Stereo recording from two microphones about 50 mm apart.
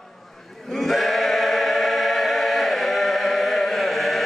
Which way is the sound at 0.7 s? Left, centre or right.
Centre.